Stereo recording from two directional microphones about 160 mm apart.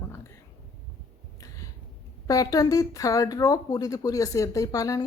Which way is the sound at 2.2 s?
20° left (ahead or behind).